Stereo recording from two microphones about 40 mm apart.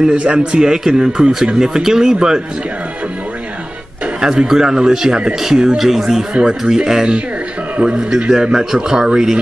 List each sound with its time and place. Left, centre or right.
0.2 s a man's voice: right; by 2.4 s centre
4.2 s a man's voice: centre